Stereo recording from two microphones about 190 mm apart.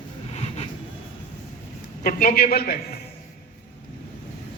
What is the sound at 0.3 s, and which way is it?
Vehicle, 35° left (ahead or behind).